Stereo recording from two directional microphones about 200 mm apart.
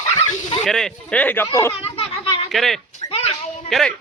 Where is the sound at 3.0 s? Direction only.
25° left (ahead or behind).